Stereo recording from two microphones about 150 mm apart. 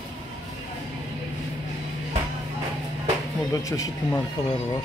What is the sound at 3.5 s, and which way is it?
Speech, 25° left (ahead or behind).